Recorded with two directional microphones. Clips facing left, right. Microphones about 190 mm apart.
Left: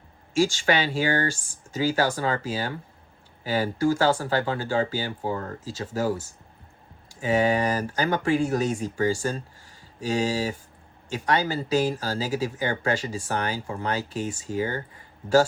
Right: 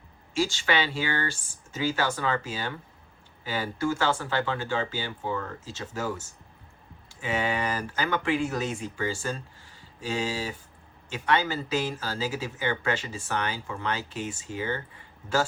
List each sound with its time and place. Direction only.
0.3 s speech: 45° left (ahead or behind)